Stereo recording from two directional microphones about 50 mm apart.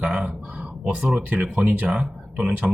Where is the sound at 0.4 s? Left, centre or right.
Right.